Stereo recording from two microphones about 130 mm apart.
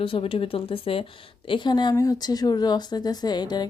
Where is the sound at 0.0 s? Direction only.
45° left (ahead or behind).